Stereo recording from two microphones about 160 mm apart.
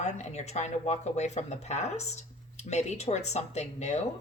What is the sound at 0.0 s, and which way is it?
A woman's voice, 45° left (ahead or behind).